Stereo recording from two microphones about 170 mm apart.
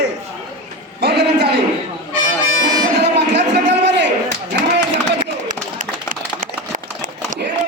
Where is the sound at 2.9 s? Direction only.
90° right.